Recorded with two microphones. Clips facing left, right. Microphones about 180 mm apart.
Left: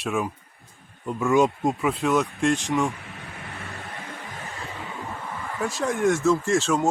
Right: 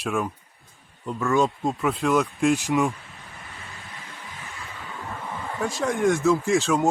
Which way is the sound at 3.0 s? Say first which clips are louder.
Left 5 dB; 70° left (ahead or behind).